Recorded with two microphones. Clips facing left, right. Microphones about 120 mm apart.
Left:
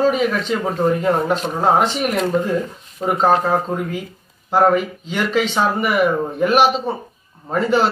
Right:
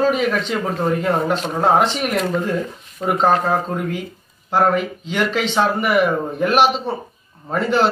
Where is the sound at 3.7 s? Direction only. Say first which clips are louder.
Even; 5° left (ahead or behind).